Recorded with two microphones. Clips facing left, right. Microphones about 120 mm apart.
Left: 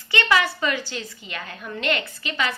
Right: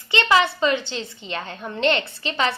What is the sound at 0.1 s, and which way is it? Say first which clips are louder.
A woman's voice: right 3 dB; 25° right (ahead or behind).